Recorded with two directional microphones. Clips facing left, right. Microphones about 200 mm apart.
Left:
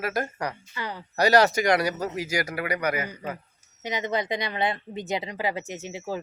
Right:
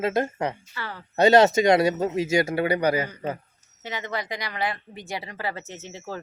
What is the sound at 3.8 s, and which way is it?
Speech, 15° left (ahead or behind).